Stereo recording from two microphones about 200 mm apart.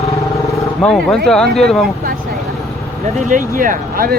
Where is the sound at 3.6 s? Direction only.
45° right (ahead or behind).